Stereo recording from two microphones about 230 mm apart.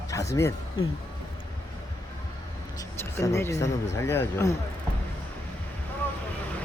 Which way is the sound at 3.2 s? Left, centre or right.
Centre.